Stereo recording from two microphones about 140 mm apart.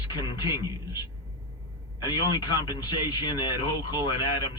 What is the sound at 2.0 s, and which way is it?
Speech, 30° left (ahead or behind).